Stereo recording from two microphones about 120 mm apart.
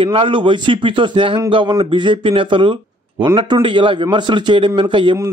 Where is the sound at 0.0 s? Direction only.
45° right (ahead or behind).